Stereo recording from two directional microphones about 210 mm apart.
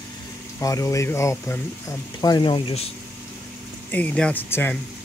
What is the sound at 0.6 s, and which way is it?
Speech, 15° left (ahead or behind).